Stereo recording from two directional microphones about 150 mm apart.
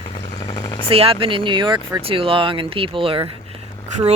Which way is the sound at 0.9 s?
40° right (ahead or behind).